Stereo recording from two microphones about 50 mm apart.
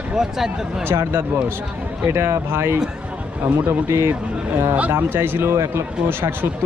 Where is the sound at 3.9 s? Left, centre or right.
Right.